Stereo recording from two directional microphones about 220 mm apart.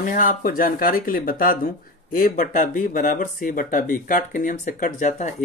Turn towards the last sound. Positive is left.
turn(degrees=35)  # may be behind; listen again after turning